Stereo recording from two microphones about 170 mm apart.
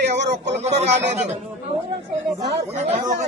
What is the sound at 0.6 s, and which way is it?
Speech, 40° right (ahead or behind).